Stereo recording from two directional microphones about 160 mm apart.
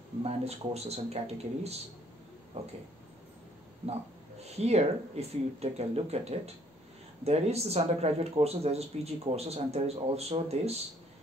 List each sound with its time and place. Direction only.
0.2 s speech: 40° right (ahead or behind)
3.8 s speech: 40° right (ahead or behind)